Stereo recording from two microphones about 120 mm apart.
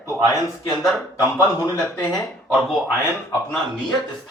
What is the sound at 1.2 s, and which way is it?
Speech, 25° left (ahead or behind).